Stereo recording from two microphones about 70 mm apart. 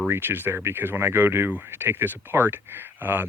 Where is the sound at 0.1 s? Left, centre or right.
Right.